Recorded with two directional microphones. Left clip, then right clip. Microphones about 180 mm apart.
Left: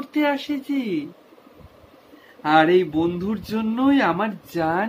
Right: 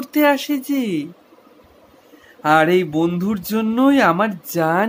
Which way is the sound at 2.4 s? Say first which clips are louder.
Right 2 dB; 70° right (ahead or behind).